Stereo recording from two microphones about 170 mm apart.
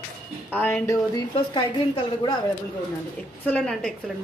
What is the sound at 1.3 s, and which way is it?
A woman's voice, 25° left (ahead or behind).